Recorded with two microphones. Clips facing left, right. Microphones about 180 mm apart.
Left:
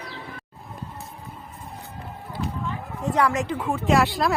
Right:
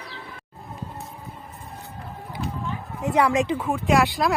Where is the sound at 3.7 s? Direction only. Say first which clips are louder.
Left 2 dB; centre (ahead or behind).